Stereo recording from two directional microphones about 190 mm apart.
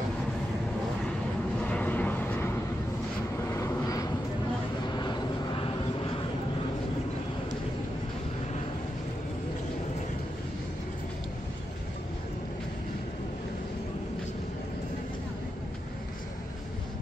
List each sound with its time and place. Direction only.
1.6 s vehicle: 10° left (ahead or behind)